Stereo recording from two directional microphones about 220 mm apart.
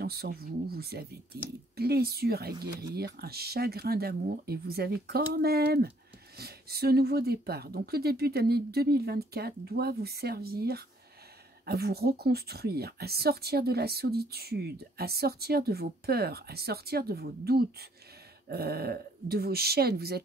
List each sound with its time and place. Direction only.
0.0 s speech: 45° right (ahead or behind)